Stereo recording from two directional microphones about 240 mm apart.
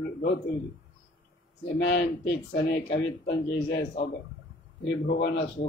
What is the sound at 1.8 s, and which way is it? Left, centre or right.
Speech, left.